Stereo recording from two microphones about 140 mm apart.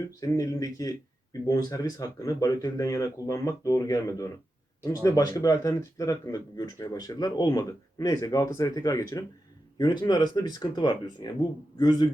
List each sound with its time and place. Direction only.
0.2 s speech: 25° left (ahead or behind)